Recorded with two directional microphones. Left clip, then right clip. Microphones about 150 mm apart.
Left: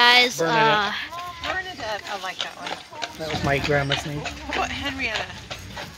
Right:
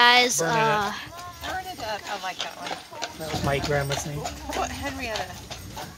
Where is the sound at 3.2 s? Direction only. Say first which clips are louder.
Left 3 dB; 60° left (ahead or behind).